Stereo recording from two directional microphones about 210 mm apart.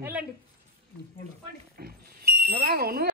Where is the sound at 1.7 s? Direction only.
45° right (ahead or behind).